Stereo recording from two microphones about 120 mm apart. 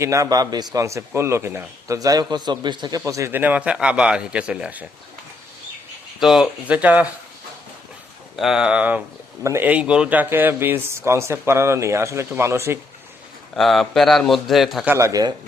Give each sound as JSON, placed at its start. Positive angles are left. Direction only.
{"t": 0.0, "sound": "speech", "side_deg": -25}
{"t": 3.0, "sound": "speech", "side_deg": -25}
{"t": 6.1, "sound": "speech", "side_deg": 0}
{"t": 8.4, "sound": "a man's voice", "side_deg": -5}
{"t": 9.4, "sound": "speech", "side_deg": -25}
{"t": 9.6, "sound": "speech", "side_deg": -10}
{"t": 13.6, "sound": "a man's voice", "side_deg": 0}
{"t": 14.8, "sound": "speech", "side_deg": -25}